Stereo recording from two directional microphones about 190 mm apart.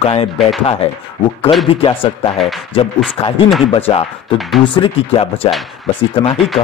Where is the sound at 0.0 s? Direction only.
30° left (ahead or behind).